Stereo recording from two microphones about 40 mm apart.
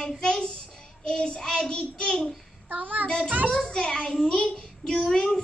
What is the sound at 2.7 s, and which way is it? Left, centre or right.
Speech, right.